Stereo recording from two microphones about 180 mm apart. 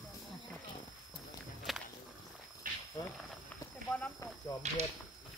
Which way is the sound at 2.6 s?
50° right (ahead or behind).